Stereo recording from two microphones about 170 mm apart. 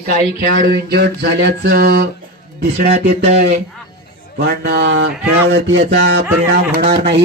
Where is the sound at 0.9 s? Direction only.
70° right (ahead or behind).